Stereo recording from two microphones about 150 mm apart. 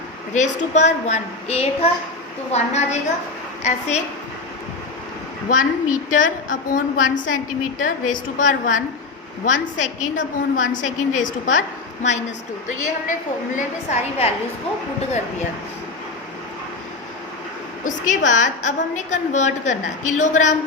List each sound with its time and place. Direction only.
0.3 s a woman's voice: 50° left (ahead or behind)
5.5 s a woman's voice: 60° left (ahead or behind)
12.6 s a woman's voice: 55° left (ahead or behind)
17.8 s a woman's voice: 55° left (ahead or behind)